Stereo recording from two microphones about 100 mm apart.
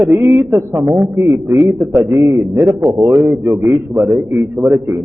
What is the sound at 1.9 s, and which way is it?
A man's voice, 20° right (ahead or behind).